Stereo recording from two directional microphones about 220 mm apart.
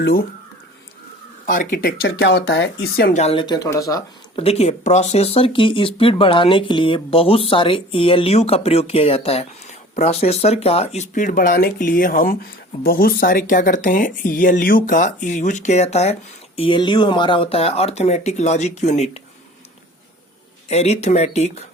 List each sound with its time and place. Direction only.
0.0 s speech: 40° left (ahead or behind)
1.5 s speech: 40° left (ahead or behind); by 4.4 s 15° left (ahead or behind)
4.4 s speech: 30° left (ahead or behind)
20.7 s speech: 30° left (ahead or behind)